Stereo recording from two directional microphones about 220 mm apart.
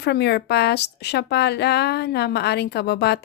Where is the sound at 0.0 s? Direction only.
50° left (ahead or behind).